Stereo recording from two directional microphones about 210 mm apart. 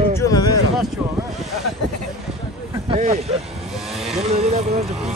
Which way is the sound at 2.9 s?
30° right (ahead or behind).